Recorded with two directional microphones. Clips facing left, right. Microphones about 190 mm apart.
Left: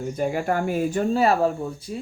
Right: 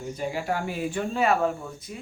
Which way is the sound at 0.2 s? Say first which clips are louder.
Left 5 dB; 50° left (ahead or behind).